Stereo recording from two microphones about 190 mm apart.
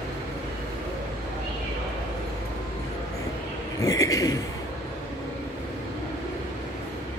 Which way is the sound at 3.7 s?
15° left (ahead or behind).